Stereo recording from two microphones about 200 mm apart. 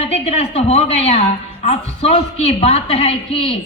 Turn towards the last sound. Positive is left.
turn(degrees=30)  # may be behind; listen again after turning